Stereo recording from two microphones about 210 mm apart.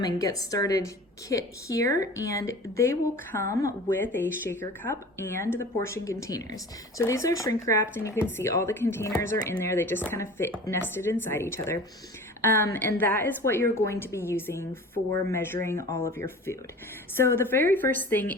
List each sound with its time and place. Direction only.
0.0 s speech: 15° left (ahead or behind)